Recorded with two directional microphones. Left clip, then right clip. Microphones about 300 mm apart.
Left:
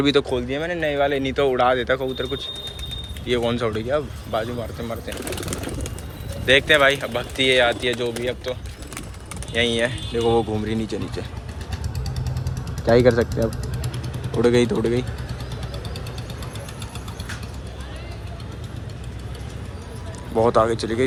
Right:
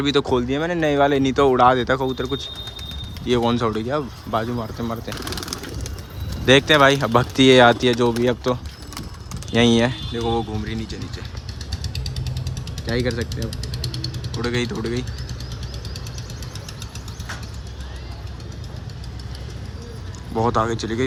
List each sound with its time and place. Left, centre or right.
0.0 s speech: centre
6.5 s speech: centre
12.8 s speech: centre
14.3 s speech: centre
20.3 s speech: centre